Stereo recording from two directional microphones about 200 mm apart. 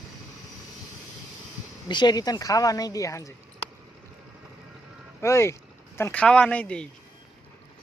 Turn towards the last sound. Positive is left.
turn(degrees=5)  # may be behind; listen again after turning